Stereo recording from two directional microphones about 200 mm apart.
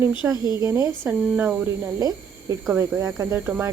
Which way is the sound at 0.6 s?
15° right (ahead or behind).